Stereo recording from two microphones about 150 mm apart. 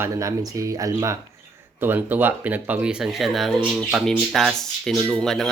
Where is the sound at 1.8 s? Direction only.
15° right (ahead or behind); by 5.5 s 5° left (ahead or behind).